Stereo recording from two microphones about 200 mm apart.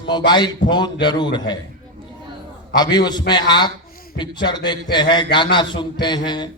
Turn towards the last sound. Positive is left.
turn(degrees=20)  # may be behind; listen again after turning